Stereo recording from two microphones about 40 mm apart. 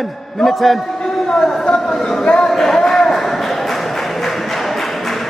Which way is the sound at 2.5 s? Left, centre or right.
Centre.